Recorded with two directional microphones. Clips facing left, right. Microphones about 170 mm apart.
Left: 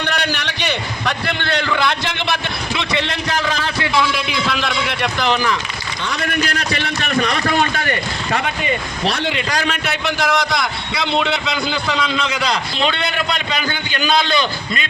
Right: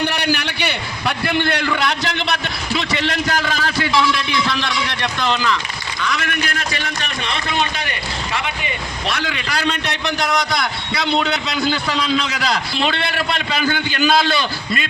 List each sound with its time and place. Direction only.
0.0 s a sound: 10° right (ahead or behind)
2.7 s a man's voice: centre (ahead or behind)
5.3 s speech: 15° left (ahead or behind)
6.0 s a man's voice: 30° left (ahead or behind); by 8.4 s 50° left (ahead or behind)
9.0 s speech: 30° left (ahead or behind)
9.6 s a man's voice: 5° left (ahead or behind)